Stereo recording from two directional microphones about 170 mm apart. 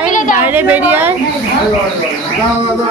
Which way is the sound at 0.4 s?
10° right (ahead or behind).